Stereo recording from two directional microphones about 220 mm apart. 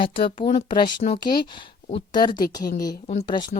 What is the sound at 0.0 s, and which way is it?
Speech, 25° left (ahead or behind).